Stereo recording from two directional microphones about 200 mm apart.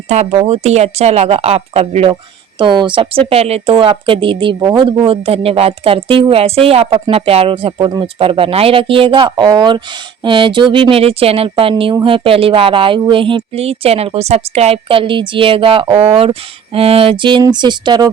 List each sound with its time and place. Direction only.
0.1 s speech: 35° right (ahead or behind)